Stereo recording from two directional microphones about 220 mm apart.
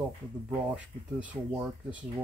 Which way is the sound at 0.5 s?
5° right (ahead or behind).